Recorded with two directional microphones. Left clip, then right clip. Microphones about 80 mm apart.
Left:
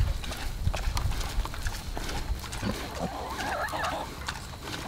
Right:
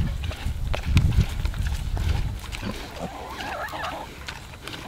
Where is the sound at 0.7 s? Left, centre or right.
Left.